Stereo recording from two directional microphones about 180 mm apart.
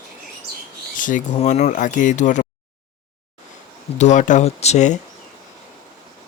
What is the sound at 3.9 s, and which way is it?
Speech, 40° left (ahead or behind).